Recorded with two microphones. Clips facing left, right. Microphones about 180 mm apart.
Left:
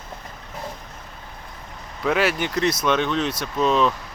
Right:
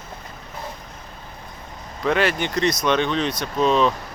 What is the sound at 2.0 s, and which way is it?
Speech, 5° left (ahead or behind).